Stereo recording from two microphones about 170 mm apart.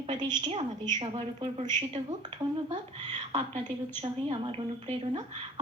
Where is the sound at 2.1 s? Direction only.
30° right (ahead or behind).